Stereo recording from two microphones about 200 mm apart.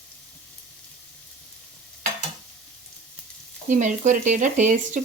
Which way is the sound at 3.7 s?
40° right (ahead or behind).